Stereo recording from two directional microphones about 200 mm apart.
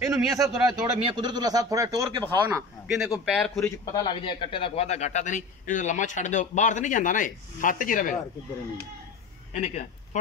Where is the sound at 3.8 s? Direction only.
20° left (ahead or behind); by 8.2 s 40° left (ahead or behind).